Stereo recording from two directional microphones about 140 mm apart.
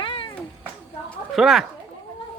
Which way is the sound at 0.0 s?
35° left (ahead or behind).